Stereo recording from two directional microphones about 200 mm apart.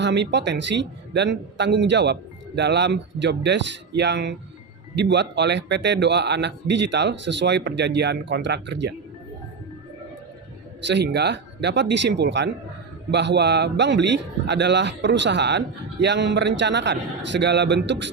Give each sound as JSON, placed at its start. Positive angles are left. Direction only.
{"t": 0.0, "sound": "a man's voice", "side_deg": -60}
{"t": 10.8, "sound": "a man's voice", "side_deg": -60}